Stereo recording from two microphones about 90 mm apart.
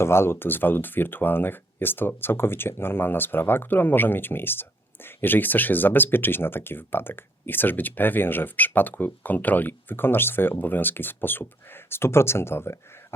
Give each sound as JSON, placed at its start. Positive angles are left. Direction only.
{"t": 0.0, "sound": "speech", "side_deg": 30}